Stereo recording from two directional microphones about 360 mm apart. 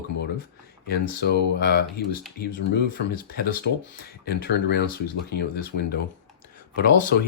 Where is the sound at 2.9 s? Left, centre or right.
Left.